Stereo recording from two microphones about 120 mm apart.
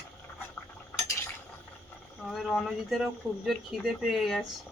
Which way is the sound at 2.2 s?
Centre (ahead or behind).